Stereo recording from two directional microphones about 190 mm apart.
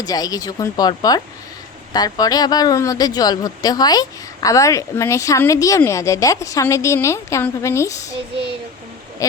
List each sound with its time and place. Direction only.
0.0 s speech: 20° left (ahead or behind)